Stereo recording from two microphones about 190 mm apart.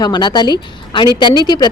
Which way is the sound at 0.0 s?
25° left (ahead or behind).